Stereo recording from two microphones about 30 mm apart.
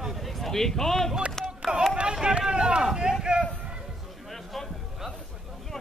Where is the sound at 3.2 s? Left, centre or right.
Right.